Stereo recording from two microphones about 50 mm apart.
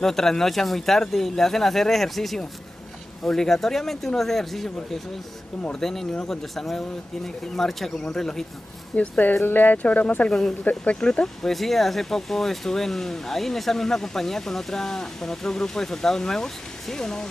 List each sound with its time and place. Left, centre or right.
0.0 s speech: centre
8.9 s speech: left
9.4 s speech: left
10.8 s speech: centre
11.5 s speech: centre